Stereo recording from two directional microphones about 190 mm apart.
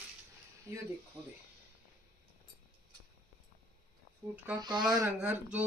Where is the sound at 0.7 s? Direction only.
15° right (ahead or behind).